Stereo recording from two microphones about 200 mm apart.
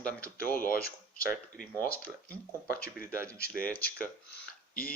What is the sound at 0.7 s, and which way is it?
Speech, 50° left (ahead or behind).